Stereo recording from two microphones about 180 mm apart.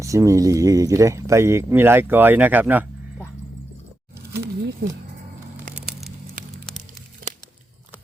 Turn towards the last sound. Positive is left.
turn(degrees=0)  # may be behind; listen again after turning